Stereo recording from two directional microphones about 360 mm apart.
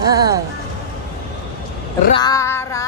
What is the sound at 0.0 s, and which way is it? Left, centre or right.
Music, centre.